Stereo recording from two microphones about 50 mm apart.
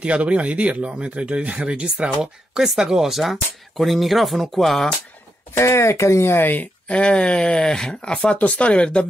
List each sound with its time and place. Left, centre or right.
0.0 s speech: right; by 4.8 s centre
5.5 s speech: left
6.2 s speech: left
6.9 s speech: left